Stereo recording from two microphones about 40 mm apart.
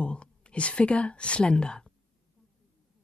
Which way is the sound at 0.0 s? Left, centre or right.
Left.